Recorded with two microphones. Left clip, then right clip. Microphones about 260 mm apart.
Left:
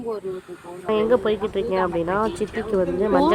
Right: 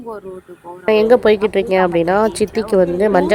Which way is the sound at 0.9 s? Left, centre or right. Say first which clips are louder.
Right 8 dB; centre.